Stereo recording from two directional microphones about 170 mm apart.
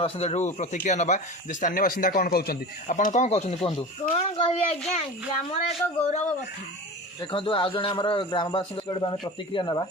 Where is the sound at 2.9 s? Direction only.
45° left (ahead or behind).